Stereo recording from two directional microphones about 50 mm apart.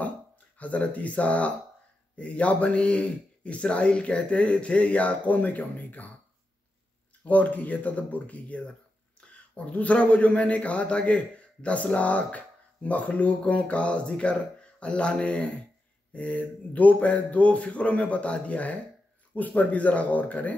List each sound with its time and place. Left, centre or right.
0.6 s a man's voice: left
7.2 s speech: left
9.2 s a sound: left
9.6 s a man's voice: left